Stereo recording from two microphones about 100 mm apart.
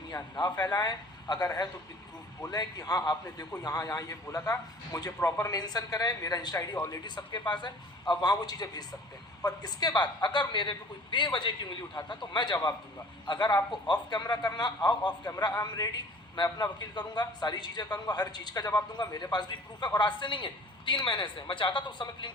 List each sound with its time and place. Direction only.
0.1 s a man's voice: 40° left (ahead or behind)
6.7 s speech: 30° left (ahead or behind)
7.0 s a man's voice: 45° left (ahead or behind)